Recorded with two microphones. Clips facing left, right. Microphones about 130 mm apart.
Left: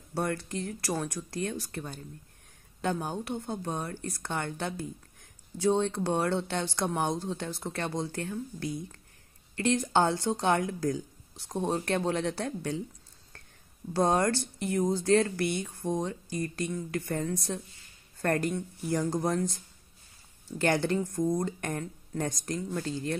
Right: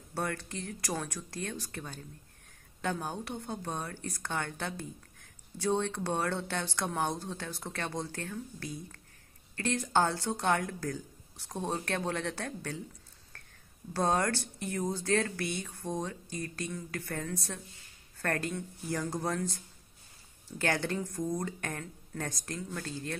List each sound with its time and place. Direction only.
0.1 s speech: 15° left (ahead or behind)
13.3 s whispering: 15° left (ahead or behind)
13.9 s speech: 15° left (ahead or behind)
20.5 s speech: 15° left (ahead or behind)